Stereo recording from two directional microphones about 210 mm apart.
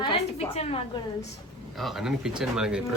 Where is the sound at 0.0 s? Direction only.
30° left (ahead or behind).